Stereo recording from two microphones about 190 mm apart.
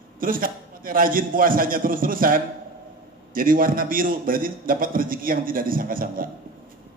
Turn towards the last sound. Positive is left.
turn(degrees=-50)  # may be behind; listen again after turning